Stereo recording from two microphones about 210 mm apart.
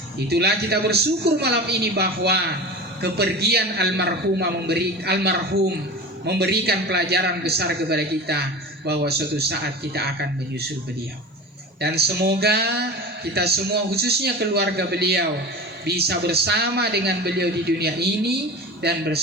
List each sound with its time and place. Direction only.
0.3 s speech: 50° right (ahead or behind)
11.8 s speech: 50° right (ahead or behind)